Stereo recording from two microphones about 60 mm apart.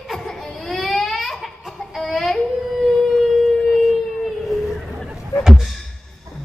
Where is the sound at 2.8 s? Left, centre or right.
Centre.